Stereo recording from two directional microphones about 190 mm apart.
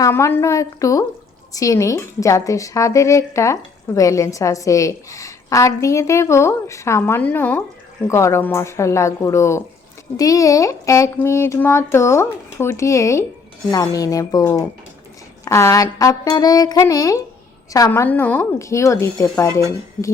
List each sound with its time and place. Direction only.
0.0 s a woman's voice: 15° left (ahead or behind)